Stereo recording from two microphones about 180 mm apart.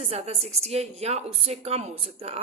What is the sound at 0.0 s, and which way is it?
A woman's voice, 35° right (ahead or behind).